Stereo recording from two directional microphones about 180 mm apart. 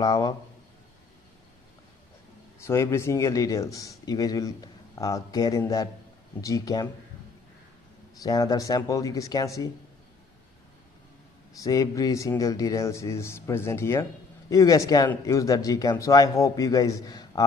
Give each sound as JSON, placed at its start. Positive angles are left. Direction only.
{"t": 0.0, "sound": "a man's voice", "side_deg": 20}
{"t": 2.6, "sound": "a man's voice", "side_deg": 15}
{"t": 8.2, "sound": "a man's voice", "side_deg": 20}
{"t": 11.6, "sound": "a man's voice", "side_deg": 20}